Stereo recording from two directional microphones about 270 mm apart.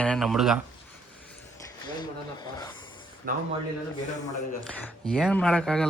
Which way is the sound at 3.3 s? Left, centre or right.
Right.